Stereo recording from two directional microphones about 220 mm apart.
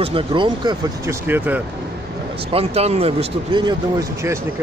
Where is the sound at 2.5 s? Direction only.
25° right (ahead or behind).